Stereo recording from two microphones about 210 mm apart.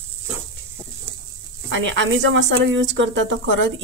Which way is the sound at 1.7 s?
65° right (ahead or behind).